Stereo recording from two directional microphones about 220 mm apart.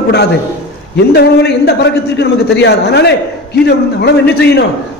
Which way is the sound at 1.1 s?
50° left (ahead or behind).